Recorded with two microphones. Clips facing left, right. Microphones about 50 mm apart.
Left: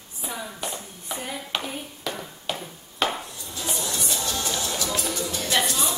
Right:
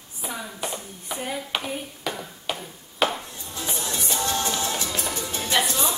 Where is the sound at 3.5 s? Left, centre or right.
Right.